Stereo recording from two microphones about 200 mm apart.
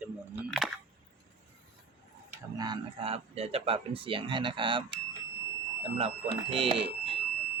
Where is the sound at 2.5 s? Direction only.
20° right (ahead or behind).